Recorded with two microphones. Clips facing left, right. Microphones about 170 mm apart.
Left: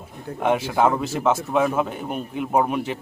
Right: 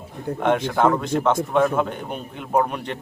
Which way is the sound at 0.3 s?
5° left (ahead or behind).